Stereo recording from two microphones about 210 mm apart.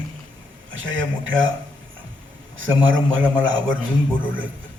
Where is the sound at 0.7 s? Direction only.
65° right (ahead or behind).